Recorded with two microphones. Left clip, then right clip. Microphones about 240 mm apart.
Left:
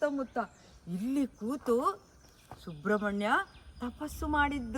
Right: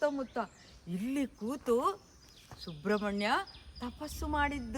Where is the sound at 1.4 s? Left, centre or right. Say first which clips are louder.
Right 1 dB; right.